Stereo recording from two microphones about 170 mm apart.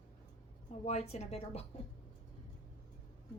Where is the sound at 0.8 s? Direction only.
40° left (ahead or behind).